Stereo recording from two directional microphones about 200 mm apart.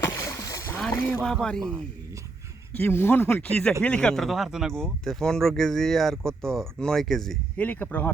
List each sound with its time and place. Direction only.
0.0 s boat: 15° left (ahead or behind)
0.8 s speech: 5° left (ahead or behind)